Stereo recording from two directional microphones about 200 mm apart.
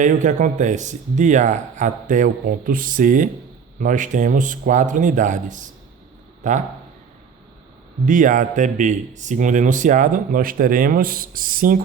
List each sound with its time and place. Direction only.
0.0 s speech: 40° right (ahead or behind)
8.0 s speech: 40° right (ahead or behind)